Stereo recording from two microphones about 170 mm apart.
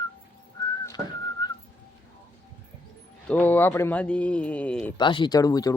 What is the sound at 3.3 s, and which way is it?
Speech, 10° left (ahead or behind).